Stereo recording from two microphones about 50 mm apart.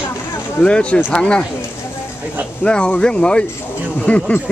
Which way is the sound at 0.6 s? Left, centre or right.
Left.